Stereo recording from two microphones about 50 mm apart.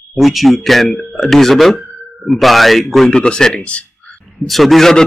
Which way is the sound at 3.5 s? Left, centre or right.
Left.